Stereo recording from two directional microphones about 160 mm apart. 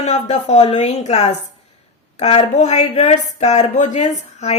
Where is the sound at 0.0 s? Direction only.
45° left (ahead or behind).